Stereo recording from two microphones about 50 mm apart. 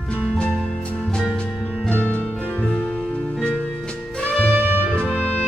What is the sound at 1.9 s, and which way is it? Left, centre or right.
Music, left.